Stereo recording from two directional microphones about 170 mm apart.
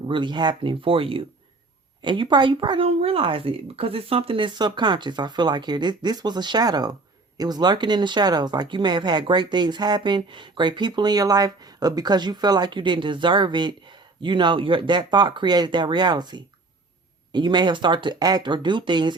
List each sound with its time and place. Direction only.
0.1 s speech: 30° right (ahead or behind)